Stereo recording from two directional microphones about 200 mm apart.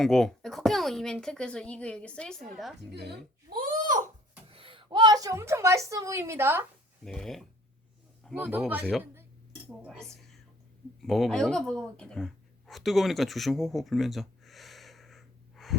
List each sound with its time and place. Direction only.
0.0 s speech: centre (ahead or behind)
2.9 s a sound: 55° right (ahead or behind); by 4.0 s 40° right (ahead or behind)
4.5 s a woman's voice: 25° right (ahead or behind)
7.0 s speech: 5° left (ahead or behind)
8.4 s a woman's voice: 10° right (ahead or behind)